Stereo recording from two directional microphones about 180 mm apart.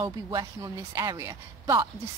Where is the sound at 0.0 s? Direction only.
20° right (ahead or behind).